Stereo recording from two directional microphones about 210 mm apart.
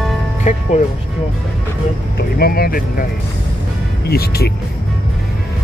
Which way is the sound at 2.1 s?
45° left (ahead or behind).